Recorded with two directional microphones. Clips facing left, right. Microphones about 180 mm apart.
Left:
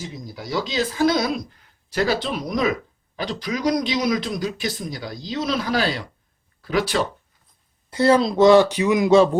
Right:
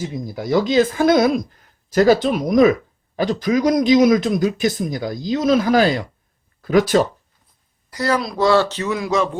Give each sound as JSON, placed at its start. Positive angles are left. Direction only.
{"t": 0.0, "sound": "a man's voice", "side_deg": -50}
{"t": 7.9, "sound": "speech", "side_deg": 25}
{"t": 9.0, "sound": "speech", "side_deg": 30}